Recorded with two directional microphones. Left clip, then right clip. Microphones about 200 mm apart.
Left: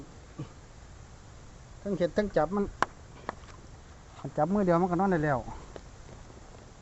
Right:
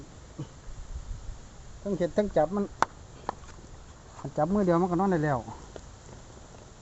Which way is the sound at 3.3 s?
35° right (ahead or behind).